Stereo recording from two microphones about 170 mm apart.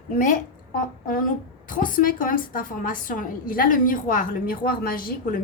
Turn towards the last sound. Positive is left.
turn(degrees=55)  # may be behind; listen again after turning